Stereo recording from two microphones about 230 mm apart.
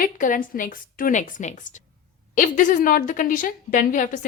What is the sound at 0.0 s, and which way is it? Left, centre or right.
A woman's voice, left.